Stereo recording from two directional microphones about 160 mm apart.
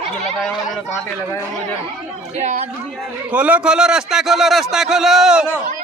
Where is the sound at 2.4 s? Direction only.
45° right (ahead or behind).